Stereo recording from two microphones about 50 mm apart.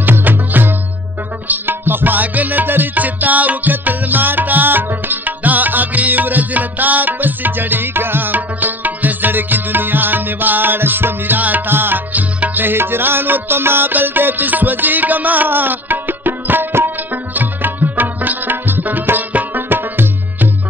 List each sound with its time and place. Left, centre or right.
0.2 s music: right